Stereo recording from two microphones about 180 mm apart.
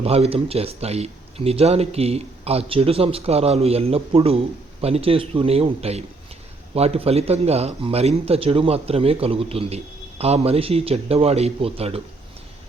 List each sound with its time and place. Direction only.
0.0 s a man's voice: 35° right (ahead or behind)